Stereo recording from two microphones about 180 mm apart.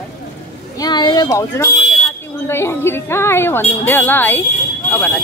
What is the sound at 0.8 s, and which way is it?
Speech, 25° left (ahead or behind).